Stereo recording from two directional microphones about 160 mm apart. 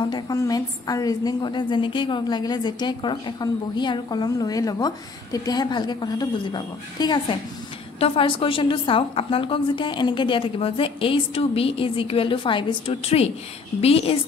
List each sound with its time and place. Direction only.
0.0 s a woman's voice: 25° left (ahead or behind)